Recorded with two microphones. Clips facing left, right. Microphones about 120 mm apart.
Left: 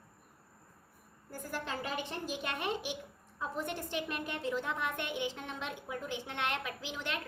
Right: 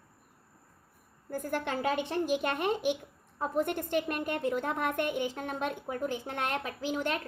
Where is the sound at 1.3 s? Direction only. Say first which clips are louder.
Right 7 dB; 55° right (ahead or behind).